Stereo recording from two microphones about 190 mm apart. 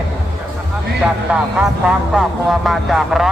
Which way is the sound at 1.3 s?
5° right (ahead or behind).